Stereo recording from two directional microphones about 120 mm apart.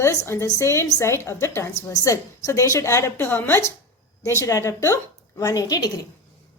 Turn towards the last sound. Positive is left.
turn(degrees=30)  # may be behind; listen again after turning